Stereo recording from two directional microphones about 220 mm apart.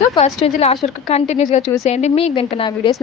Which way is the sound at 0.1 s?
25° left (ahead or behind).